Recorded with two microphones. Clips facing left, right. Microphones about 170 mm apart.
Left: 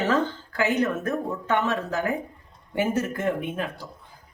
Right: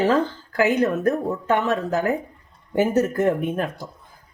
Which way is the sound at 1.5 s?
40° right (ahead or behind).